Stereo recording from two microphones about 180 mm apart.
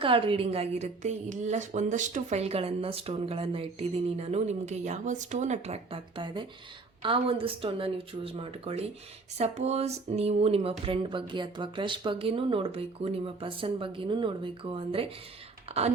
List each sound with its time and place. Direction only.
0.0 s a woman's voice: 30° right (ahead or behind)